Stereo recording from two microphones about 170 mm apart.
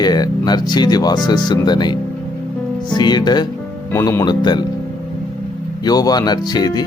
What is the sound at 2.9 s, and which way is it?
Speech, 25° left (ahead or behind).